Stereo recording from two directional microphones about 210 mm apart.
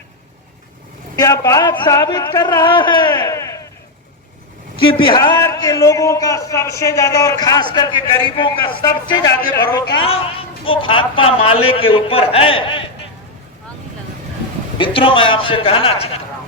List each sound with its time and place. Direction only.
1.1 s speech: 15° left (ahead or behind)
5.0 s a man's voice: 20° left (ahead or behind)
9.4 s a man's voice: 45° left (ahead or behind)
10.0 s speech: 25° left (ahead or behind)
14.8 s speech: 25° left (ahead or behind)